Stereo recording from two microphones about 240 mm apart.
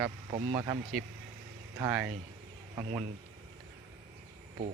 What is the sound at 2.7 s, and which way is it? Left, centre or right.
Speech, right.